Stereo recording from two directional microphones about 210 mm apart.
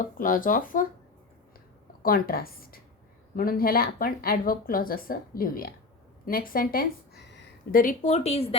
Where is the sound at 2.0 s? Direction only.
45° left (ahead or behind).